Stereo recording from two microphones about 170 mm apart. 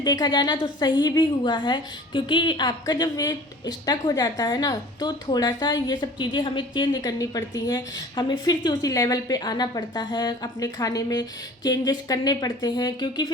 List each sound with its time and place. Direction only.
0.0 s a woman's voice: 25° left (ahead or behind)